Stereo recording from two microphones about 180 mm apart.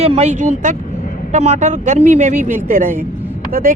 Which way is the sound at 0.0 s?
35° right (ahead or behind).